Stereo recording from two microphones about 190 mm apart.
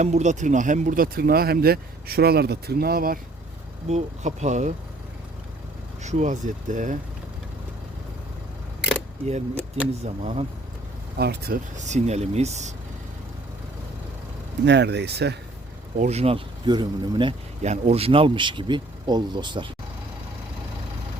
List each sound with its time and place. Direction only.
0.0 s speech: 40° right (ahead or behind)
3.8 s speech: 35° right (ahead or behind)
6.0 s speech: 40° right (ahead or behind)
10.0 s speech: 30° right (ahead or behind)
11.2 s speech: 55° right (ahead or behind)
11.9 s speech: 35° right (ahead or behind)
14.6 s speech: 65° right (ahead or behind)
16.0 s speech: 35° right (ahead or behind)